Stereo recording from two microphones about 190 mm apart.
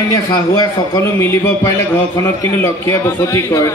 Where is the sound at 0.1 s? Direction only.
20° left (ahead or behind).